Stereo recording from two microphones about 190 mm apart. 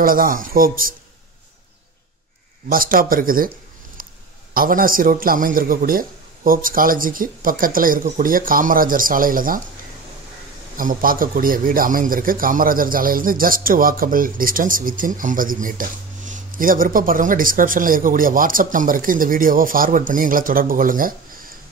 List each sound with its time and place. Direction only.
0.0 s a man's voice: 50° right (ahead or behind)
2.7 s a man's voice: 50° right (ahead or behind)
4.6 s a man's voice: 50° right (ahead or behind)
10.8 s a man's voice: 45° right (ahead or behind)